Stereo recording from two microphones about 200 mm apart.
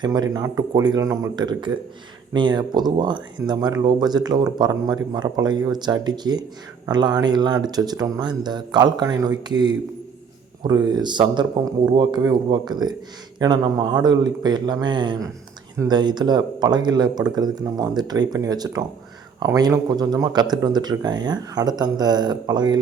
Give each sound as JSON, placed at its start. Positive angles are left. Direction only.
{"t": 0.0, "sound": "speech", "side_deg": -20}